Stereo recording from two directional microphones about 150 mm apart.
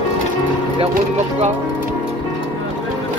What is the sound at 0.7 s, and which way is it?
Speech, 50° right (ahead or behind).